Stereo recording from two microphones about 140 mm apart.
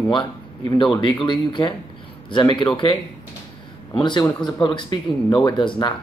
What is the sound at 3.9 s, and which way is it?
Speech, 35° left (ahead or behind).